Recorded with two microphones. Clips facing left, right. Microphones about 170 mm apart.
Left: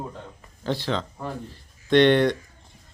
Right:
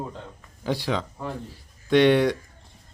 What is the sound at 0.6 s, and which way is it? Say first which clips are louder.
A man's voice: even; 10° right (ahead or behind).